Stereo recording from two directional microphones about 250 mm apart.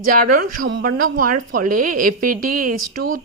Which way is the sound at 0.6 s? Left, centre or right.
Right.